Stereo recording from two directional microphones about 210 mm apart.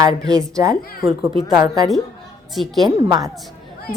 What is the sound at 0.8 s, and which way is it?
Speech, 45° left (ahead or behind).